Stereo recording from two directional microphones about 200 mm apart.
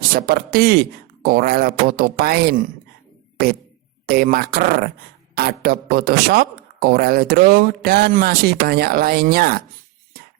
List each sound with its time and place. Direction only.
0.1 s speech: 50° right (ahead or behind)
4.0 s speech: 50° right (ahead or behind)